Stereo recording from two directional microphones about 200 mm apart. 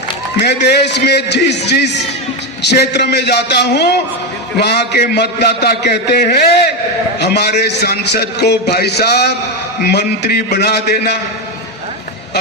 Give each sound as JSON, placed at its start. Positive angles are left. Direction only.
{"t": 0.4, "sound": "a man's voice", "side_deg": 55}